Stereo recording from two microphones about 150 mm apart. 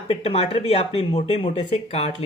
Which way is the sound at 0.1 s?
40° left (ahead or behind).